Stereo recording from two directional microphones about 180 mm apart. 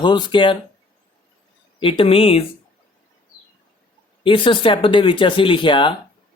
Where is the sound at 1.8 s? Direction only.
30° left (ahead or behind).